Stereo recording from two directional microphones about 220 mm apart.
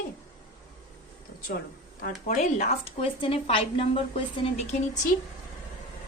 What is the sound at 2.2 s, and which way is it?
A woman's voice, 35° left (ahead or behind).